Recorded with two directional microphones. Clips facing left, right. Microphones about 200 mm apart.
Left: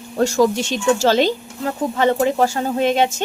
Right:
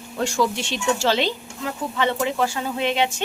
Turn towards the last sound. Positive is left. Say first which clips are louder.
# left 5 dB
turn(degrees=40)  # may be behind; listen again after turning